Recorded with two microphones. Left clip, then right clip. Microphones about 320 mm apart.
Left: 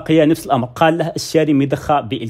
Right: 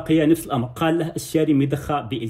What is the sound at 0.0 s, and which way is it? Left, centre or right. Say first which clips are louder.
Speech: left 5 dB; left.